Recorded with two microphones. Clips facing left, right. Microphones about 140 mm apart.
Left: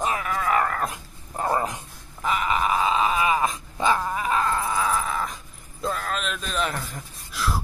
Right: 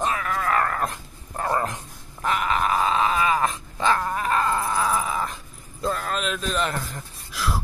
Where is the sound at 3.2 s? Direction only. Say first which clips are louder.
Even; 10° left (ahead or behind).